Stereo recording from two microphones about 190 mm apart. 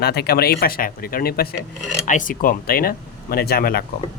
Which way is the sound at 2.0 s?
45° left (ahead or behind).